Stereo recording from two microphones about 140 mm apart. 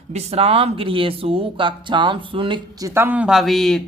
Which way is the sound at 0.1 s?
45° right (ahead or behind).